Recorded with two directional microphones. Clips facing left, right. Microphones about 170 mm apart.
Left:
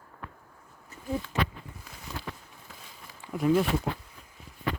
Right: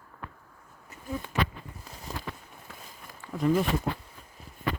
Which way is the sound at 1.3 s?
25° left (ahead or behind).